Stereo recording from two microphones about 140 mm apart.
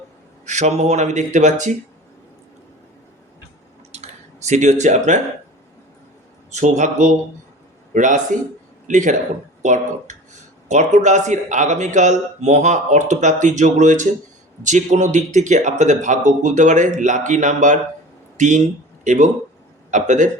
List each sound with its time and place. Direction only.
0.4 s a man's voice: 55° right (ahead or behind)
3.9 s a sound: 55° right (ahead or behind)
6.5 s a man's voice: 60° right (ahead or behind)